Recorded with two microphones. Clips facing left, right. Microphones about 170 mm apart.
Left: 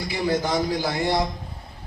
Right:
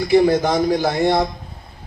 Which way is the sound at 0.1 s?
55° right (ahead or behind).